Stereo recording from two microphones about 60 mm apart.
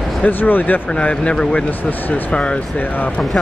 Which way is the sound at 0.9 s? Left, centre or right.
Centre.